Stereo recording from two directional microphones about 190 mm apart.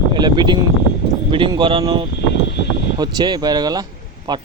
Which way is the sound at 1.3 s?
25° right (ahead or behind).